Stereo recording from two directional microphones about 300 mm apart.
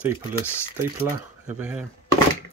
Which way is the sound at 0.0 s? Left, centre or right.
Centre.